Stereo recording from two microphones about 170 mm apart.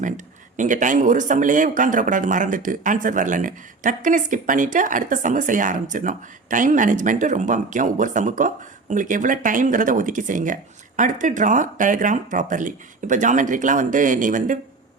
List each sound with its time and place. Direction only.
0.5 s speech: 50° right (ahead or behind)